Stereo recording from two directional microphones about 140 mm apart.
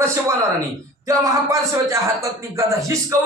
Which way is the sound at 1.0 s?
25° right (ahead or behind).